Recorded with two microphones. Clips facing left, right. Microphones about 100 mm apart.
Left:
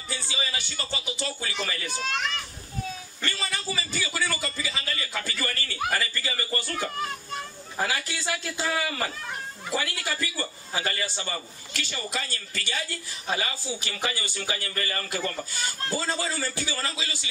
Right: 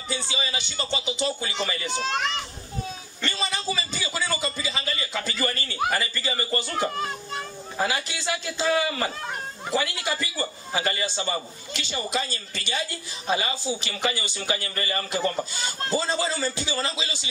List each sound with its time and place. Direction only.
0.1 s a man's voice: 20° right (ahead or behind)
2.1 s a child's voice: 30° right (ahead or behind)
3.2 s a sound: 20° right (ahead or behind)
5.9 s a man's voice: 20° right (ahead or behind)